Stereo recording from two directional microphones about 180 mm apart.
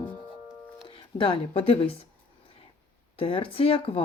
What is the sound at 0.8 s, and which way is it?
Speech, 30° left (ahead or behind).